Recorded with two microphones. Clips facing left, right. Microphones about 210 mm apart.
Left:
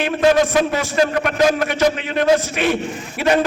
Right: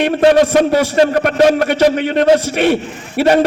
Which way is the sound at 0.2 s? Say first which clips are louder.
Right 4 dB; 35° right (ahead or behind).